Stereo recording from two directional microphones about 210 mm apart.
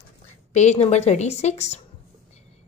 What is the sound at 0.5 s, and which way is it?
A woman's voice, 35° left (ahead or behind).